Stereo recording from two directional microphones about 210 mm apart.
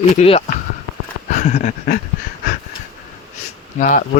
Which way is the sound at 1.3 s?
35° left (ahead or behind).